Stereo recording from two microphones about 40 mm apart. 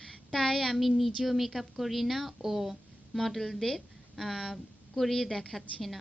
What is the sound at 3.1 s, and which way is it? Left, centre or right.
Speech, centre.